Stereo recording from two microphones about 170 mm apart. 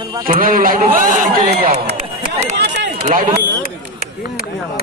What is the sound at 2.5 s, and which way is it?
Speech, 90° right.